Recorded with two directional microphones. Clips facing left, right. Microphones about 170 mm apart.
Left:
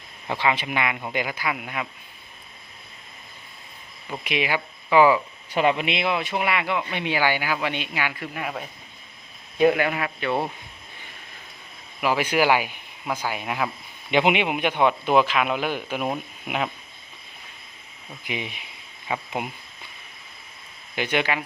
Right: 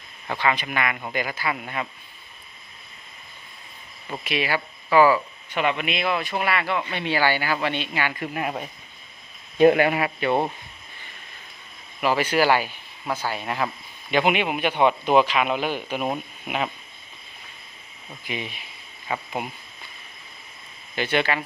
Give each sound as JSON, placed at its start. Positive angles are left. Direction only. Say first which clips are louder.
{"t": 0.4, "sound": "speech", "louder": "even", "side_deg": 20}
{"t": 4.2, "sound": "speech", "louder": "even", "side_deg": 15}
{"t": 5.5, "sound": "speech", "louder": "left 3 dB", "side_deg": 30}
{"t": 9.6, "sound": "speech", "louder": "right 3 dB", "side_deg": -35}
{"t": 11.9, "sound": "speech", "louder": "right 1 dB", "side_deg": 10}
{"t": 14.1, "sound": "speech", "louder": "left 1 dB", "side_deg": 20}
{"t": 14.7, "sound": "speech", "louder": "right 2 dB", "side_deg": -10}
{"t": 15.1, "sound": "speech", "louder": "right 1 dB", "side_deg": 0}
{"t": 18.3, "sound": "speech", "louder": "even", "side_deg": 15}
{"t": 20.9, "sound": "speech", "louder": "right 1 dB", "side_deg": 10}